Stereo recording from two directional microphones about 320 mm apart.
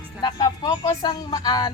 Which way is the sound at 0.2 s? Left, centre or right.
Centre.